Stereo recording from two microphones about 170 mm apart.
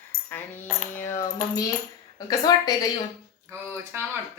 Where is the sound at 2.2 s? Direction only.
20° left (ahead or behind).